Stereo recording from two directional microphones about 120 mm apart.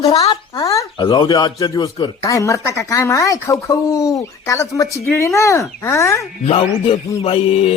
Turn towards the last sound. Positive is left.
turn(degrees=50)  # may be behind; listen again after turning